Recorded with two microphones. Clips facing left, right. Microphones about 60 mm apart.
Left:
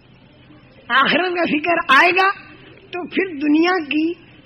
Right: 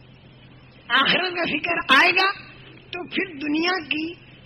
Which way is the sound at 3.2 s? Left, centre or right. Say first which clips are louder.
Left 9 dB; left.